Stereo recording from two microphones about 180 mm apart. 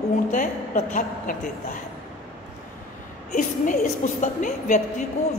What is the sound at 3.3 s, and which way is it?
A woman's voice, 45° left (ahead or behind).